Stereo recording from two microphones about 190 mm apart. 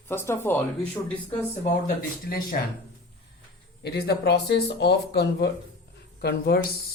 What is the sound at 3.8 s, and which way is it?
Speech, 60° left (ahead or behind).